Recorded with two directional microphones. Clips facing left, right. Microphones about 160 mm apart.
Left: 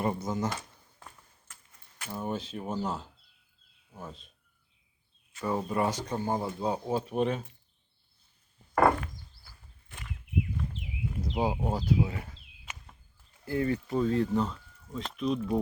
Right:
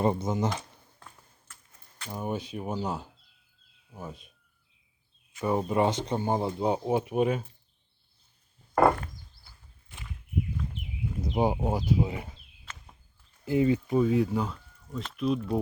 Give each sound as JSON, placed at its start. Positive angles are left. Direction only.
{"t": 0.0, "sound": "speech", "side_deg": -25}
{"t": 2.0, "sound": "speech", "side_deg": -15}
{"t": 5.4, "sound": "speech", "side_deg": -20}
{"t": 11.2, "sound": "speech", "side_deg": -20}
{"t": 13.4, "sound": "speech", "side_deg": -15}